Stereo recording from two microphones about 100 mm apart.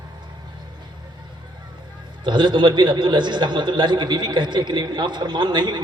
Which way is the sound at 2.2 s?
50° right (ahead or behind).